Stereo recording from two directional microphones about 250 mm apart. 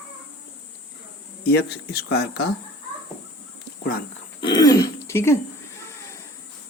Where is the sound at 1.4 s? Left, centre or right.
Left.